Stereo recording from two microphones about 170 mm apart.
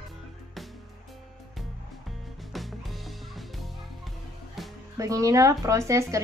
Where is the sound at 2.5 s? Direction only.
Centre (ahead or behind).